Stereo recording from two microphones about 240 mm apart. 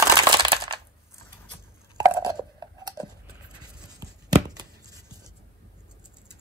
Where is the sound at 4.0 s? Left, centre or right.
Centre.